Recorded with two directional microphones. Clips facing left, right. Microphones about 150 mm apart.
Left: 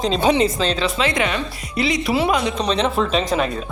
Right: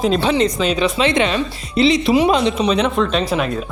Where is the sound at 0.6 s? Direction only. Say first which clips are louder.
Right 4 dB; 15° right (ahead or behind).